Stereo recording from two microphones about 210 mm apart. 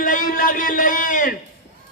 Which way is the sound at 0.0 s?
40° left (ahead or behind).